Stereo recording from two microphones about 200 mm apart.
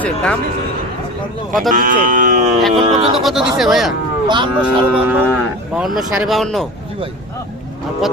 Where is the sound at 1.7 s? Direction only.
45° right (ahead or behind).